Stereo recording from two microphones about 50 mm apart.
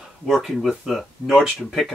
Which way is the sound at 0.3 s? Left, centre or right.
Centre.